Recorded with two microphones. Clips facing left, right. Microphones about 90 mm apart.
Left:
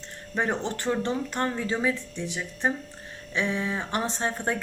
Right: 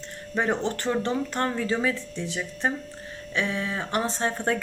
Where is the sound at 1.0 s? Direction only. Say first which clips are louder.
Right 1 dB; 15° left (ahead or behind).